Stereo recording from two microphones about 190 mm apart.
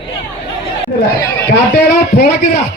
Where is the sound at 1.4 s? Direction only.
60° left (ahead or behind).